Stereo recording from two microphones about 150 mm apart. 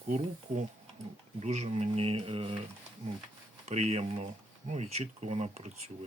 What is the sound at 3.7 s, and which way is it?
Speech, 45° right (ahead or behind).